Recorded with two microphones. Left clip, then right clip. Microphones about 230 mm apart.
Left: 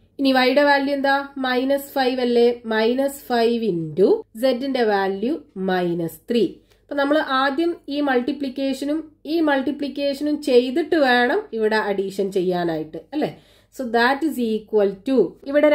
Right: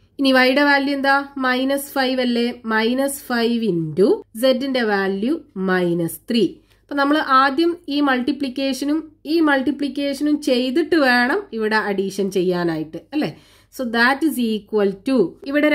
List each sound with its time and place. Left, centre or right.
0.3 s speech: right